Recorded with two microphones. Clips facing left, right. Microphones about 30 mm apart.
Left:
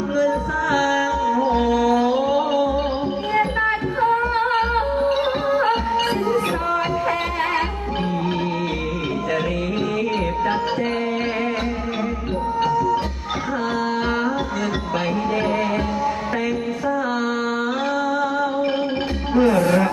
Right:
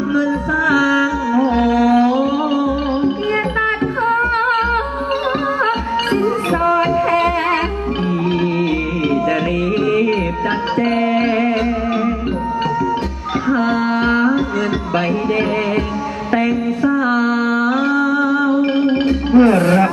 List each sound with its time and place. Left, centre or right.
0.2 s music: right
3.3 s music: right
6.7 s music: right
10.8 s music: right
13.5 s music: right
17.1 s a sound: right
18.8 s music: right
19.4 s music: right